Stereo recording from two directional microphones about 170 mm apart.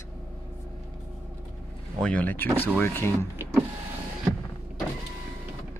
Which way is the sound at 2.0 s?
5° left (ahead or behind).